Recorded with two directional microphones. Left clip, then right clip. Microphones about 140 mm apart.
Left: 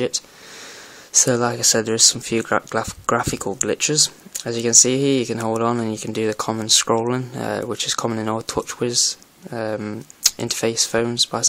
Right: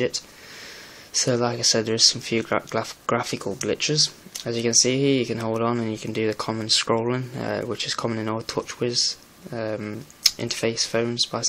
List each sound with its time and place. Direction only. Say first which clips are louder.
1.1 s speech: left 4 dB; 55° left (ahead or behind)